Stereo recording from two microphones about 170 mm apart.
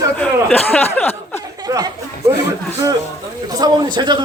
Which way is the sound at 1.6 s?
20° right (ahead or behind).